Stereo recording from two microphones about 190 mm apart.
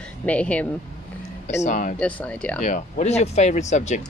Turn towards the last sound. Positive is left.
turn(degrees=40)  # may be behind; listen again after turning